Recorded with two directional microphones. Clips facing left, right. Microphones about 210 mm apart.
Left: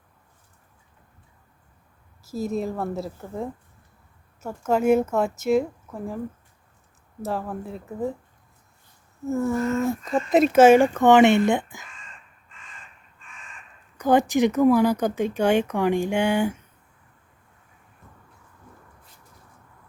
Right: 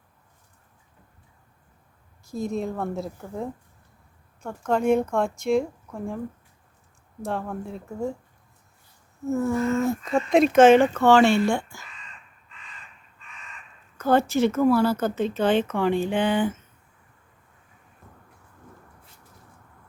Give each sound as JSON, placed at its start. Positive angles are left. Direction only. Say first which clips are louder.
{"t": 2.2, "sound": "speech", "louder": "left 1 dB", "side_deg": 5}
{"t": 7.2, "sound": "speech", "louder": "left 1 dB", "side_deg": 5}
{"t": 9.2, "sound": "speech", "louder": "even", "side_deg": 0}
{"t": 11.9, "sound": "crow", "louder": "even", "side_deg": 45}
{"t": 14.0, "sound": "speech", "louder": "left 1 dB", "side_deg": 15}